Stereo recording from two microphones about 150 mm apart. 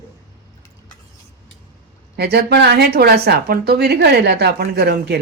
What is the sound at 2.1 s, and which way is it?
Speech, 90° right.